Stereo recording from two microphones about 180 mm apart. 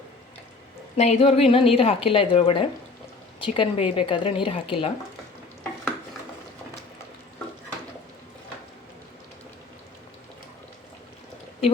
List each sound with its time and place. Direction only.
0.9 s a woman's voice: 35° left (ahead or behind)